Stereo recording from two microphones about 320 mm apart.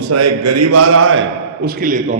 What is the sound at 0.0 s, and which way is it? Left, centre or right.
A man's voice, right.